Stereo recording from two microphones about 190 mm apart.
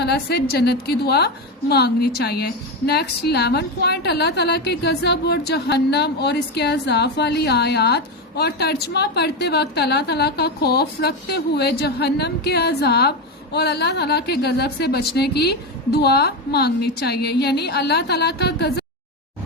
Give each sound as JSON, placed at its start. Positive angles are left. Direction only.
{"t": 0.0, "sound": "a woman's voice", "side_deg": 60}